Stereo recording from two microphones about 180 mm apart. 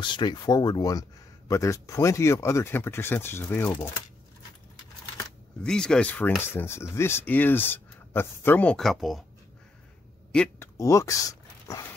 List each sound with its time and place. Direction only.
0.0 s speech: 25° left (ahead or behind)
5.6 s speech: 5° left (ahead or behind)
10.3 s speech: 5° left (ahead or behind)
10.8 s speech: 15° left (ahead or behind)